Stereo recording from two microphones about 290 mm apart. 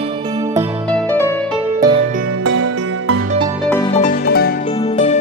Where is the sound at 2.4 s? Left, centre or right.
Right.